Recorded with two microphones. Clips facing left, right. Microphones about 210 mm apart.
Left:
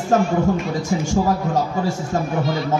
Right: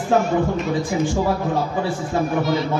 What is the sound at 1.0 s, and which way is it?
Speech, 45° left (ahead or behind).